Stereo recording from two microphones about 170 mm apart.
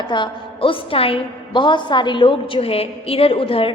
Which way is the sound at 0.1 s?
30° left (ahead or behind).